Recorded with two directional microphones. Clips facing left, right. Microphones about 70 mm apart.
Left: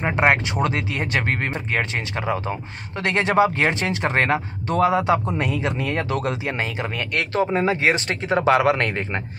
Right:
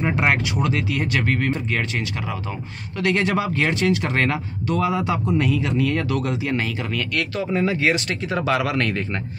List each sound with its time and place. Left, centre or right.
0.0 s speech: left